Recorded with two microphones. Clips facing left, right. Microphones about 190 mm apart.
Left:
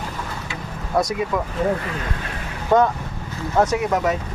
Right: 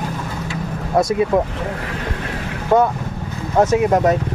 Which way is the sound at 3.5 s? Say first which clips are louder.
Right 5 dB; 25° right (ahead or behind).